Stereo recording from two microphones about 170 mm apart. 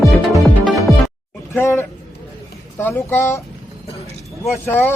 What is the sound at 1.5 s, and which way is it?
Speech, 15° left (ahead or behind).